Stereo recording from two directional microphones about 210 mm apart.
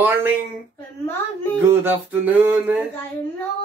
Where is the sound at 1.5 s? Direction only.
10° right (ahead or behind).